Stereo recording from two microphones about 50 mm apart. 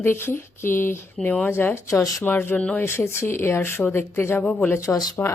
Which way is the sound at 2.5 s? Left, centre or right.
Left.